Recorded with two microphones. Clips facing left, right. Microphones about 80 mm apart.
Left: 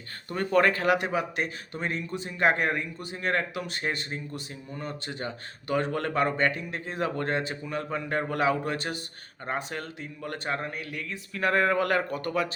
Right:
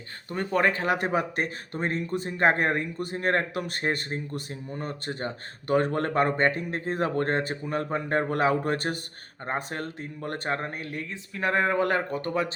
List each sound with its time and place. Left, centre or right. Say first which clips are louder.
0.3 s speech: left 1 dB; centre
0.9 s speech: right 2 dB; right
11.3 s speech: even; right